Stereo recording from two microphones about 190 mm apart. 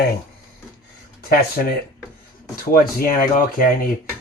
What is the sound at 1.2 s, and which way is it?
Speech, 55° left (ahead or behind).